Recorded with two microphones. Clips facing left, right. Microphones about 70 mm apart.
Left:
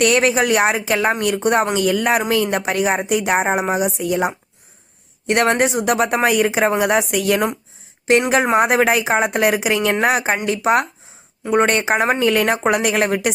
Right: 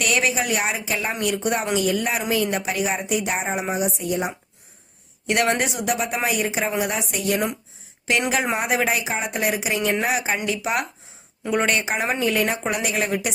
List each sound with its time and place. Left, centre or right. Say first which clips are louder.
0.0 s speech: left 7 dB; left
1.7 s speech: left 5 dB; left
5.2 s speech: left 5 dB; left
8.3 s speech: left 7 dB; left
12.3 s speech: left 6 dB; left